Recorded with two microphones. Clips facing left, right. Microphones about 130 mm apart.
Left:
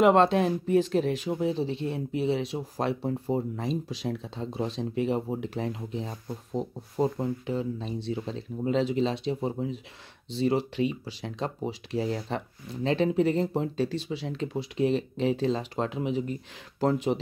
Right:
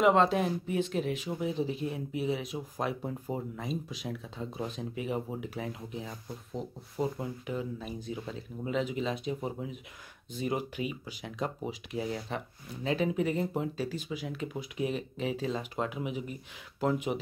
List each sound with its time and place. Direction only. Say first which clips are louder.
0.0 s speech: left 4 dB; 65° left (ahead or behind)
0.4 s speech: left 6 dB; 35° left (ahead or behind)